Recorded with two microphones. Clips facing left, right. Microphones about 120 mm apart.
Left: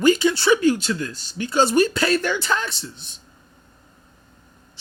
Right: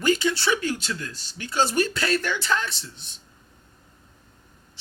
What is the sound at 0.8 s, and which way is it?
Speech, 40° left (ahead or behind).